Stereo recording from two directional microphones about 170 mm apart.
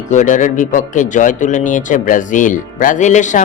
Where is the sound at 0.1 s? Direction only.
45° left (ahead or behind).